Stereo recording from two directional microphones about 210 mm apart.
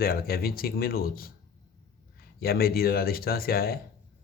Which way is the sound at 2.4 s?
45° left (ahead or behind).